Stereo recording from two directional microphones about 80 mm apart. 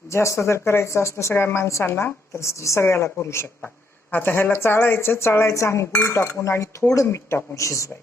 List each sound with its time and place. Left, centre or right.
0.1 s a woman's voice: left